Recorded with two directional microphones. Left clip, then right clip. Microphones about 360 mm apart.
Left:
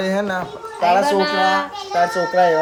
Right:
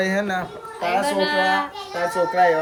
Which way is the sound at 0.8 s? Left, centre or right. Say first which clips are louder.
Left 5 dB; centre.